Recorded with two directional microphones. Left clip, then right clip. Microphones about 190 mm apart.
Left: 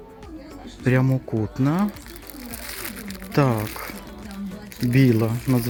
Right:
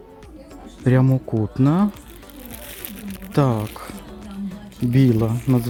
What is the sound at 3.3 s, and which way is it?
Music, 5° right (ahead or behind).